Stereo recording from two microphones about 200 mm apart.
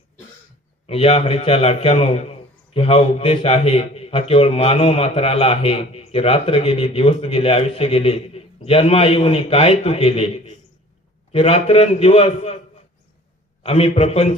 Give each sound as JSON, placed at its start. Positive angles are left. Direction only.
{"t": 0.9, "sound": "a man's voice", "side_deg": 30}
{"t": 13.6, "sound": "a man's voice", "side_deg": 30}